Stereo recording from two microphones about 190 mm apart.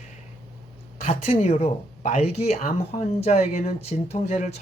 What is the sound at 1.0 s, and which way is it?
Speech, 35° left (ahead or behind).